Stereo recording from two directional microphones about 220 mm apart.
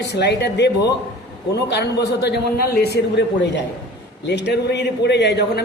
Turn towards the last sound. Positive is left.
turn(degrees=50)  # may be behind; listen again after turning